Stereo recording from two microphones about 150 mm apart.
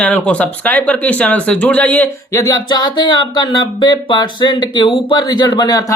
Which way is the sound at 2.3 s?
20° left (ahead or behind).